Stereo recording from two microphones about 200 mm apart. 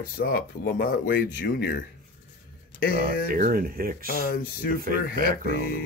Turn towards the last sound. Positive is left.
turn(degrees=-45)  # may be behind; listen again after turning